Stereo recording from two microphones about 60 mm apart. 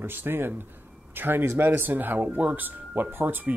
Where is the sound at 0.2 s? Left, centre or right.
Right.